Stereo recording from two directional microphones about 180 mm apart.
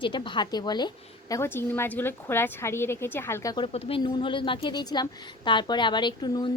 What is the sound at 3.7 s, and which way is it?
A woman's voice, 30° left (ahead or behind).